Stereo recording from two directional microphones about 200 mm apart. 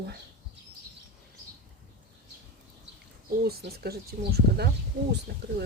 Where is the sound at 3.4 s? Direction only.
50° right (ahead or behind).